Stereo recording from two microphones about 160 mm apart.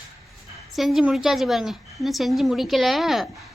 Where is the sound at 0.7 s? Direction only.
Centre (ahead or behind).